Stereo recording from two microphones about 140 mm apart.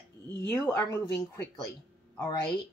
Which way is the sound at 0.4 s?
20° left (ahead or behind).